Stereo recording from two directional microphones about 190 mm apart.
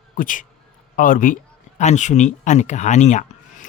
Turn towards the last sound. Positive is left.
turn(degrees=40)  # may be behind; listen again after turning